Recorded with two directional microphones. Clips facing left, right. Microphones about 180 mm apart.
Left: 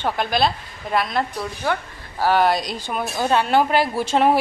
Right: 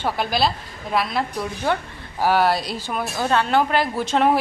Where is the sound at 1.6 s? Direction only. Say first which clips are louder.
Right 1 dB; 20° right (ahead or behind).